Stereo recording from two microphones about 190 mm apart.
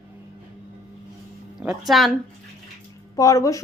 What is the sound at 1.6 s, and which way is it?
Speech, 5° right (ahead or behind).